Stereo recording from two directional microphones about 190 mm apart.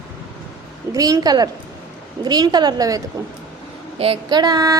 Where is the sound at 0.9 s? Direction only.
20° right (ahead or behind).